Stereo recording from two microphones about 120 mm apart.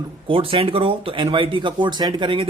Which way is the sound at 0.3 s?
50° right (ahead or behind).